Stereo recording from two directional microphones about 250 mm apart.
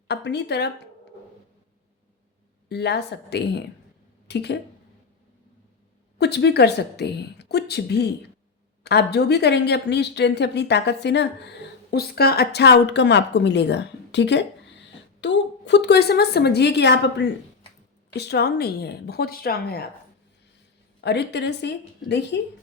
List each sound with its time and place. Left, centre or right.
0.1 s a woman's voice: left
2.6 s a woman's voice: left
6.1 s a woman's voice: left
21.0 s speech: left